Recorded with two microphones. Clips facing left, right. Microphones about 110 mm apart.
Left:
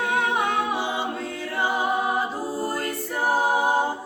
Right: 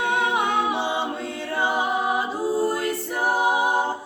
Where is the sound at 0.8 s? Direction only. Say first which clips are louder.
Right 1 dB; 25° right (ahead or behind).